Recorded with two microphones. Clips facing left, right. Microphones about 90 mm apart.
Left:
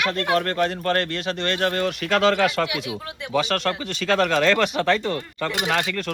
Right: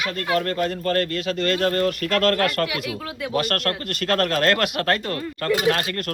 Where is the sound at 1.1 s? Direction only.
50° right (ahead or behind).